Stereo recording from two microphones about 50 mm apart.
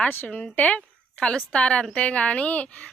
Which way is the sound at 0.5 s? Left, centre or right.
Left.